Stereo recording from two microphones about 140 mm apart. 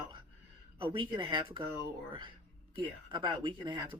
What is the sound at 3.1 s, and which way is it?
Speech, 30° right (ahead or behind).